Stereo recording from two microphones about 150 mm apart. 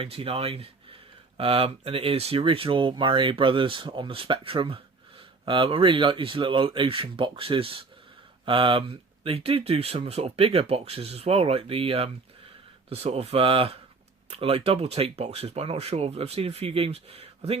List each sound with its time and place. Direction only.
0.0 s speech: 40° right (ahead or behind)